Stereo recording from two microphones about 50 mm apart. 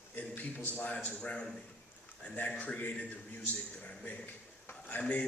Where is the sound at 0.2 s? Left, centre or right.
Left.